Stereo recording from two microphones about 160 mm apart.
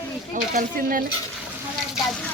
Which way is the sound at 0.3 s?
60° right (ahead or behind).